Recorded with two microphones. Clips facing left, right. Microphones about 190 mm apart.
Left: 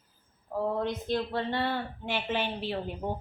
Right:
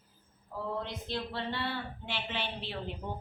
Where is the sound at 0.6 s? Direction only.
50° left (ahead or behind).